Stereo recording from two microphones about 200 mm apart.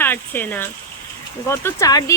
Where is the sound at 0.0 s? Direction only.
10° left (ahead or behind).